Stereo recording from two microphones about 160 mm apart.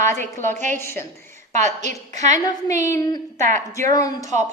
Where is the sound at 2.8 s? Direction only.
20° left (ahead or behind).